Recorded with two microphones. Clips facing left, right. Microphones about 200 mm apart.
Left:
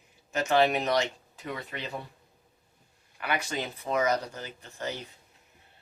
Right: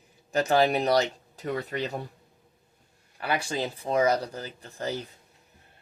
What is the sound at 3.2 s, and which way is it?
Speech, 30° right (ahead or behind).